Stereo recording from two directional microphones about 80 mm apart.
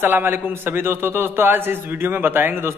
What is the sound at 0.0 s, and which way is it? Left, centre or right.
A man's voice, right.